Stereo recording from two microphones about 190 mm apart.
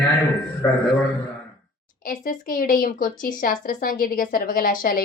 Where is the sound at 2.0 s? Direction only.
45° left (ahead or behind).